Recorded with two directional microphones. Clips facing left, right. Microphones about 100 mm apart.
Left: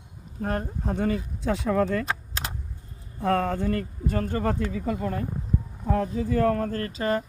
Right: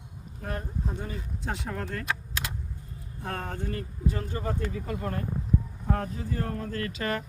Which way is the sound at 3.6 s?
90° left.